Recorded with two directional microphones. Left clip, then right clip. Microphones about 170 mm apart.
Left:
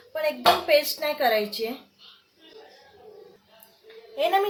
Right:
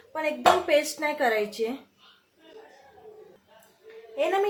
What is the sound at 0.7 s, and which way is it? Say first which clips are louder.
A woman's voice: left 2 dB; 25° right (ahead or behind).